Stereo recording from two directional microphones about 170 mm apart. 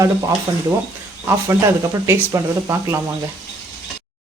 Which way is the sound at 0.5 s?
20° right (ahead or behind).